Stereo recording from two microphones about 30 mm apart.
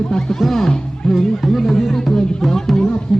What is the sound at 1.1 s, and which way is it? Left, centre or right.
Music, centre.